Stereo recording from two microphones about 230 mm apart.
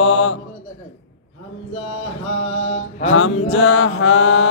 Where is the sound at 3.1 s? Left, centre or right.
Left.